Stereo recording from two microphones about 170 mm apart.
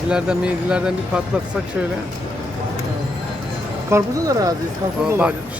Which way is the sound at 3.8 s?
20° right (ahead or behind).